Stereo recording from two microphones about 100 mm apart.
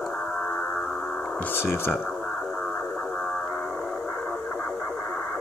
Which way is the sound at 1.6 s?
25° left (ahead or behind).